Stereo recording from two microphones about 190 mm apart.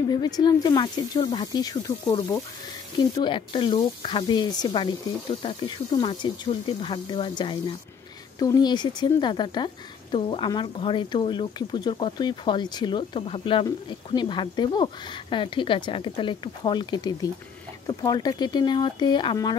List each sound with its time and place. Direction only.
0.1 s speech: 20° left (ahead or behind)